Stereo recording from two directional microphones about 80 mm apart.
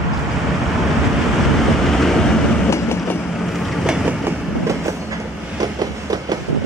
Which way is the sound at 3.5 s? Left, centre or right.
Centre.